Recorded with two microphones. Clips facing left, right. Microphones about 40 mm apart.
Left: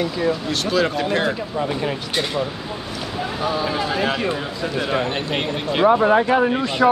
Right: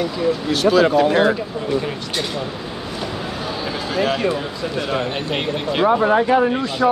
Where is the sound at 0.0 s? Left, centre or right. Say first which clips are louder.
Right 1 dB; centre.